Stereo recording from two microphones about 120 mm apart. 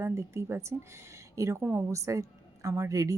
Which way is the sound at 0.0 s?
25° right (ahead or behind).